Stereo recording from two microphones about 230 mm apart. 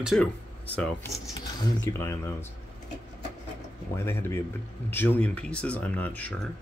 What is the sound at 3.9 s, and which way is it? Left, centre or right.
Speech, centre.